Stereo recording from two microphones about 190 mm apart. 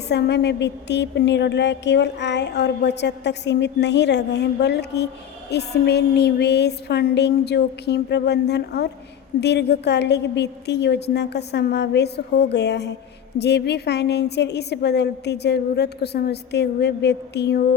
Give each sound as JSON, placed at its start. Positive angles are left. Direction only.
{"t": 0.1, "sound": "a woman's voice", "side_deg": 60}